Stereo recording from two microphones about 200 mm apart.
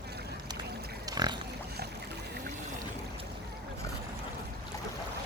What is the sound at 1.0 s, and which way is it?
Pig, 20° right (ahead or behind).